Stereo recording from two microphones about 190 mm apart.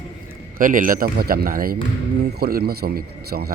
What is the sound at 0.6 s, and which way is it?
A man's voice, 45° right (ahead or behind).